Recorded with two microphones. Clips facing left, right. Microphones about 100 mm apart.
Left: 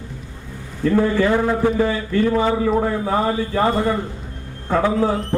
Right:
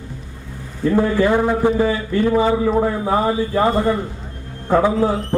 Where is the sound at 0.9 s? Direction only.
15° right (ahead or behind).